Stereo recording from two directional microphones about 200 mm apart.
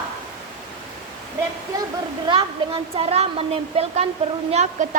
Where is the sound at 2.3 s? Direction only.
25° right (ahead or behind).